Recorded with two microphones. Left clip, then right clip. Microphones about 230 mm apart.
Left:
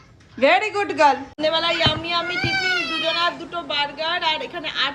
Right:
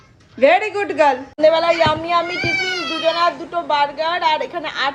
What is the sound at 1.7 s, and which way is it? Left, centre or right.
Speech, right.